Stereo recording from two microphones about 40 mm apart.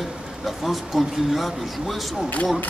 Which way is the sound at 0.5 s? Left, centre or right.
Centre.